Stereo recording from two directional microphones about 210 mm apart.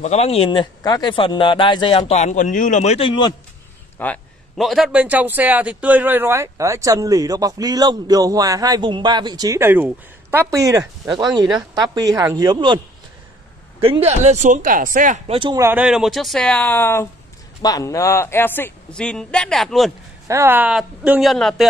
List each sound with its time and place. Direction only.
0.0 s speech: 30° left (ahead or behind)
4.0 s a man's voice: 5° left (ahead or behind); by 15.3 s 40° right (ahead or behind)
15.3 s speech: 25° right (ahead or behind)
15.6 s a man's voice: 5° right (ahead or behind)
20.2 s speech: 10° right (ahead or behind)